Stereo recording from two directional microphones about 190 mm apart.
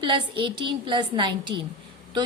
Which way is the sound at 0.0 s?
25° right (ahead or behind).